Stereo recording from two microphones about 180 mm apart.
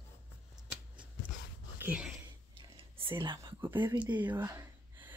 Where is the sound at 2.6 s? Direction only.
30° right (ahead or behind); by 3.9 s 15° right (ahead or behind).